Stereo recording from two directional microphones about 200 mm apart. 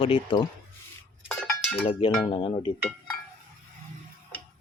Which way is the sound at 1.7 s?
30° left (ahead or behind).